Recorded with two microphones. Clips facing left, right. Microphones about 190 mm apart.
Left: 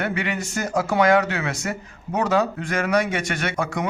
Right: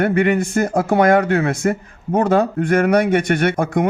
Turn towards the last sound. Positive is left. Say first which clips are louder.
# right 8 dB
turn(degrees=-50)  # may be behind; listen again after turning